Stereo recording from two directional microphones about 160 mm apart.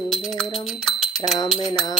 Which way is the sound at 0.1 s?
Centre (ahead or behind).